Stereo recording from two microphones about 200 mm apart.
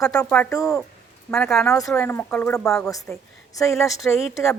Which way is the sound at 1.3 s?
5° left (ahead or behind).